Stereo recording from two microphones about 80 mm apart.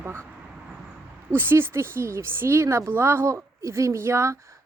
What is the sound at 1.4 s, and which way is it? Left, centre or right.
Speech, right.